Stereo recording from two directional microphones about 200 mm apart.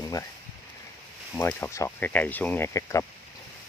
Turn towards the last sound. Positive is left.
turn(degrees=15)  # may be behind; listen again after turning